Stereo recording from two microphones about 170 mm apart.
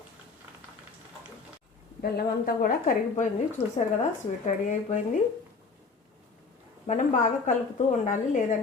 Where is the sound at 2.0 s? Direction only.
60° left (ahead or behind).